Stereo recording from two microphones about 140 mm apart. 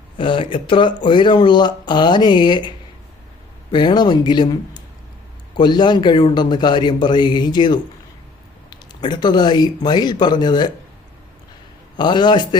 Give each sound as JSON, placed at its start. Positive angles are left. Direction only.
{"t": 0.2, "sound": "speech", "side_deg": 40}
{"t": 11.9, "sound": "speech", "side_deg": 30}